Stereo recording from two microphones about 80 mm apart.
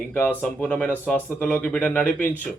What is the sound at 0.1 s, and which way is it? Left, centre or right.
A man's voice, left.